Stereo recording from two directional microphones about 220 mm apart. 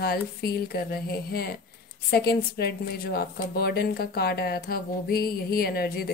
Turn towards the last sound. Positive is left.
turn(degrees=45)  # may be behind; listen again after turning